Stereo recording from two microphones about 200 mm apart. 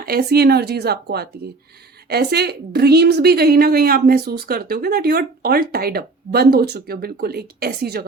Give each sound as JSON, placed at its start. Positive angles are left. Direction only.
{"t": 0.0, "sound": "a woman's voice", "side_deg": -50}